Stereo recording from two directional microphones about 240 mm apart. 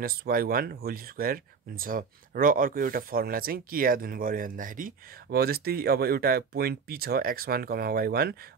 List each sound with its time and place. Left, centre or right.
0.0 s speech: right